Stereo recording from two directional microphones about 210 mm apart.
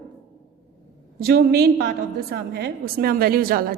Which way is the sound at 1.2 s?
45° right (ahead or behind).